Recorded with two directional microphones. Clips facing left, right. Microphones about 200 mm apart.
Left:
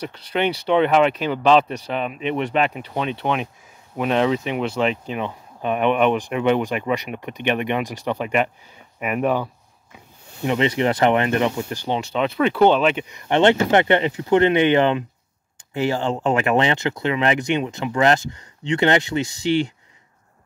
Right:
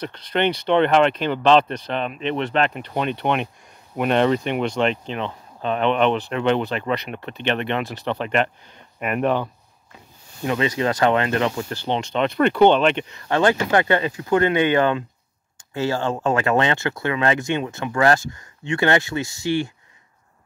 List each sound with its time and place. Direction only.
0.0 s speech: 10° left (ahead or behind)
10.4 s speech: 20° left (ahead or behind); by 13.0 s 5° left (ahead or behind)
13.1 s speech: 20° left (ahead or behind)